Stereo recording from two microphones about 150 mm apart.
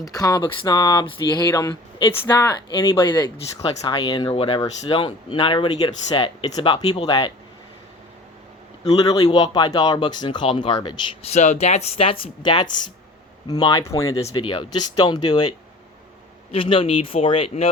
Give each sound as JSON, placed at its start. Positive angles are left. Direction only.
{"t": 0.0, "sound": "speech", "side_deg": 25}
{"t": 2.0, "sound": "speech", "side_deg": 35}
{"t": 9.0, "sound": "speech", "side_deg": 25}
{"t": 11.3, "sound": "speech", "side_deg": 50}
{"t": 14.3, "sound": "speech", "side_deg": 35}